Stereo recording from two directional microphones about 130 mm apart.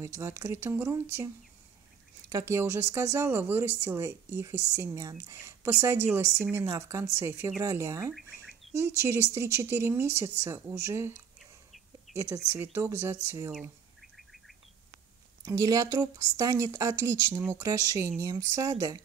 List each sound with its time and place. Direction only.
0.0 s speech: 20° right (ahead or behind)
8.1 s bird: centre (ahead or behind)
8.7 s speech: 20° right (ahead or behind)
12.1 s a sound: centre (ahead or behind)
12.7 s speech: 20° right (ahead or behind)
15.4 s speech: 25° right (ahead or behind)